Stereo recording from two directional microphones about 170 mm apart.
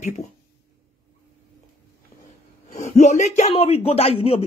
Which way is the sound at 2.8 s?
40° left (ahead or behind).